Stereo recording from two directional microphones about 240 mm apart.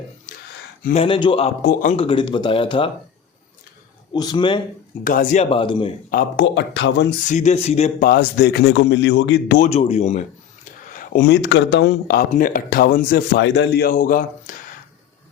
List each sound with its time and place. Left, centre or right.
0.9 s speech: left
4.1 s speech: centre
5.0 s speech: left
6.1 s a man's voice: left
7.3 s a man's voice: left
9.6 s speech: left